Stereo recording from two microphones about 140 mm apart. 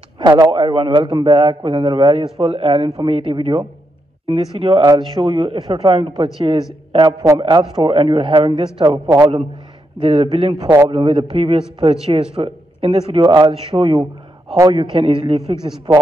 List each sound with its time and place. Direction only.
0.2 s a man's voice: 30° right (ahead or behind)
9.9 s a man's voice: 45° right (ahead or behind)
10.6 s a man's voice: 25° right (ahead or behind)
10.9 s a man's voice: 40° right (ahead or behind)